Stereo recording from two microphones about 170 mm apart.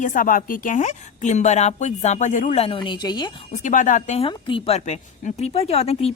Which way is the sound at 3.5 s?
45° left (ahead or behind).